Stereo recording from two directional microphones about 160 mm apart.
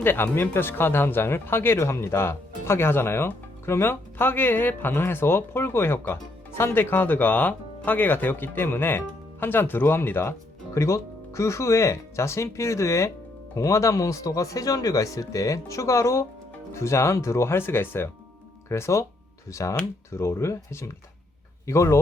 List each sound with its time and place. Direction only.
0.0 s speech: 15° left (ahead or behind)